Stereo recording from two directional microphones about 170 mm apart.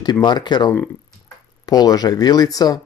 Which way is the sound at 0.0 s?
25° left (ahead or behind).